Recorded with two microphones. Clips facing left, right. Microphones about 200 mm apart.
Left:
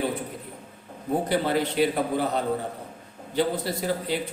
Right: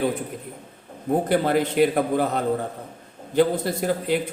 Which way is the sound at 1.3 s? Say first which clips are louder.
Right 4 dB; 50° right (ahead or behind).